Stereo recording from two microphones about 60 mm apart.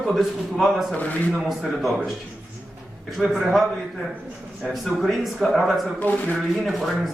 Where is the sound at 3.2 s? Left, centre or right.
Centre.